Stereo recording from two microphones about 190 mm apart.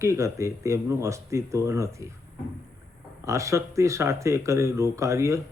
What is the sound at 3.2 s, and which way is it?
Speech, 15° right (ahead or behind).